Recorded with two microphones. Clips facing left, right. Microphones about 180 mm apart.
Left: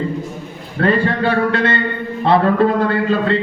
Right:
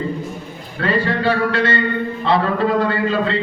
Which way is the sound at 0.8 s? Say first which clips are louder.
Left 3 dB; 55° left (ahead or behind).